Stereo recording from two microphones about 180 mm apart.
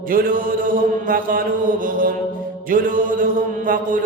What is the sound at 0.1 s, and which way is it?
Mantra, 50° right (ahead or behind).